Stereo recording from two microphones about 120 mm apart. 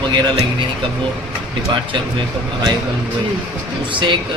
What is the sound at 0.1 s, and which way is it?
Speech, 40° right (ahead or behind).